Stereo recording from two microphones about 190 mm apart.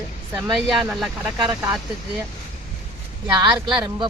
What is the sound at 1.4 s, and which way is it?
Speech, 20° right (ahead or behind).